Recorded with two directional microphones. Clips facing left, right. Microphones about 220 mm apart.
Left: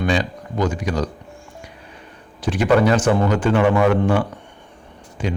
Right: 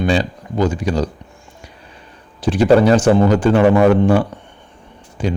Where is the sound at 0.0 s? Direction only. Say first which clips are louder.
Right 3 dB; 30° right (ahead or behind).